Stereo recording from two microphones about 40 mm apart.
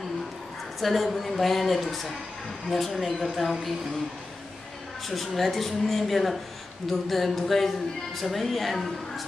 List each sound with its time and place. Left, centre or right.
0.7 s a woman's voice: centre
5.0 s a woman's voice: centre